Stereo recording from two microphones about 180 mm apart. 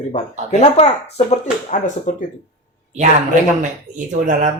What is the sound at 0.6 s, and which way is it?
Speech, 35° left (ahead or behind).